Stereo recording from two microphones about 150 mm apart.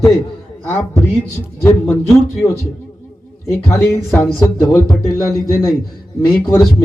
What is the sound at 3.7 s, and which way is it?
Speech, 20° left (ahead or behind).